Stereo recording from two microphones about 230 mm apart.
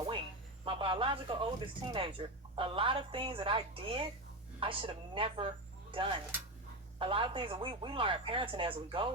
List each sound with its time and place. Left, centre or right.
0.6 s speech: right